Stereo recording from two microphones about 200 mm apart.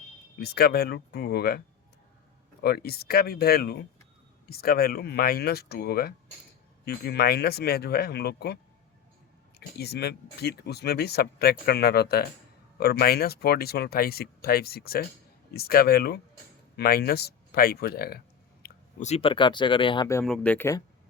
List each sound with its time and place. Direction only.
0.3 s speech: 50° left (ahead or behind)
9.6 s speech: 55° left (ahead or behind)
18.6 s speech: 35° left (ahead or behind); by 20.2 s 20° left (ahead or behind)
20.2 s speech: 5° left (ahead or behind)